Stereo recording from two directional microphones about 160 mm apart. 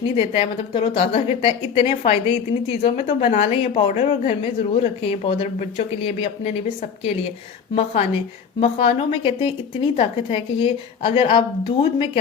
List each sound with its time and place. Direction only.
0.2 s a woman's voice: 35° left (ahead or behind)
8.6 s a woman's voice: 40° left (ahead or behind)